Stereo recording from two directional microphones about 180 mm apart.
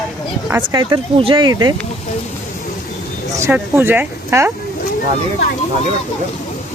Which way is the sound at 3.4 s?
15° right (ahead or behind).